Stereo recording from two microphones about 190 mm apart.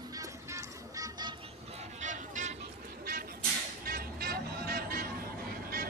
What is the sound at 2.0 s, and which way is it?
Vehicle, 40° right (ahead or behind).